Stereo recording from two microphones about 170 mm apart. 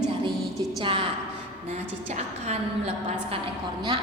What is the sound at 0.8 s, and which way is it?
Speech, 30° right (ahead or behind).